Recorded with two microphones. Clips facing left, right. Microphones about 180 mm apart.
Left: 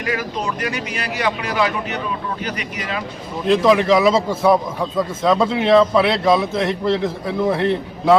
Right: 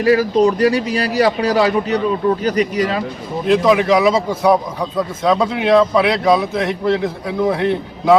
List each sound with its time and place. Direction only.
0.0 s a man's voice: 35° right (ahead or behind)
3.4 s a man's voice: centre (ahead or behind)